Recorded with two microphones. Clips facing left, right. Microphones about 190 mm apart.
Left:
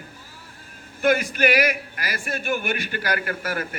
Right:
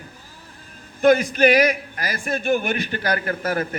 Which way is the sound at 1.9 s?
40° right (ahead or behind).